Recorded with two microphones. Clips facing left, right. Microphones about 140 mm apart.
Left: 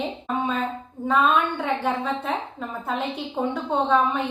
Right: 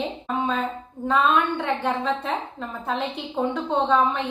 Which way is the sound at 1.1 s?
5° left (ahead or behind).